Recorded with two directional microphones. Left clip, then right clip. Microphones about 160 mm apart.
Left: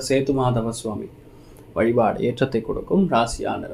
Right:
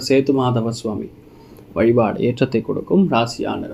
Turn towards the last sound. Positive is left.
turn(degrees=-30)  # may be behind; listen again after turning